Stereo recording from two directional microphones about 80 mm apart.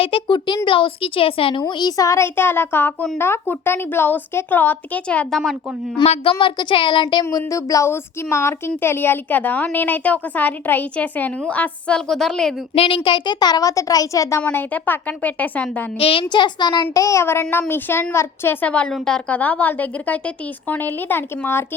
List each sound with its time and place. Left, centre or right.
0.1 s speech: left
1.5 s a woman's voice: left
2.0 s speech: left
5.0 s a woman's voice: centre
6.0 s speech: left
7.3 s speech: left; by 11.9 s centre
11.9 s a woman's voice: centre
12.9 s a child's voice: left
14.5 s speech: left
16.3 s a child's voice: left
16.9 s speech: left
18.6 s a woman's voice: centre
19.3 s speech: centre